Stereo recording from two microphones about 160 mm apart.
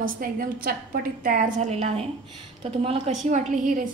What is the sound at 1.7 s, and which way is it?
A woman's voice, 40° right (ahead or behind).